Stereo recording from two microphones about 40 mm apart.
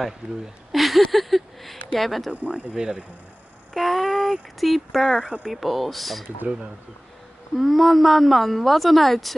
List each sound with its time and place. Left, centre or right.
0.7 s a sound: centre
2.0 s a woman's voice: centre
2.4 s speech: right
3.7 s a woman's voice: centre
7.5 s a woman's voice: centre